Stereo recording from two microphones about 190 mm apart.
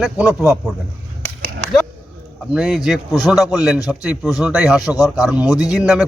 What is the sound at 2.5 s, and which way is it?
A man's voice, 5° right (ahead or behind).